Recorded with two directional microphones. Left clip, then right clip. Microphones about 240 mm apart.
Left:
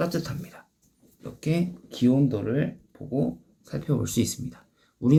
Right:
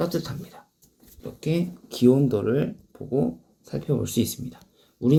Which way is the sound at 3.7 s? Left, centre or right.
Centre.